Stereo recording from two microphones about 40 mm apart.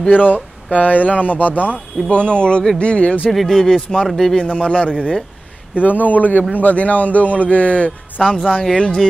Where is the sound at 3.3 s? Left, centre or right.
Centre.